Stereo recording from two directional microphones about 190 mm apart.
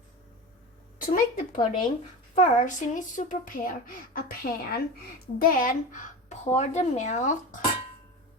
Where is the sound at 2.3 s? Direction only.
40° left (ahead or behind).